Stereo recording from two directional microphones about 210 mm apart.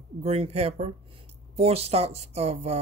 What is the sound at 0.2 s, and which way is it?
Speech, 30° right (ahead or behind).